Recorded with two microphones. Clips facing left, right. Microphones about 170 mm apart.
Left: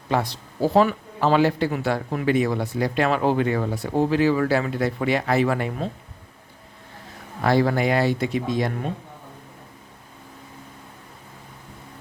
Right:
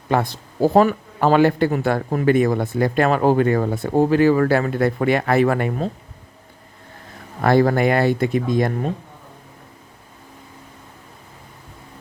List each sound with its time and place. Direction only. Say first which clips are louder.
0.1 s speech: right 3 dB; 50° right (ahead or behind)
7.4 s speech: right 4 dB; 50° right (ahead or behind)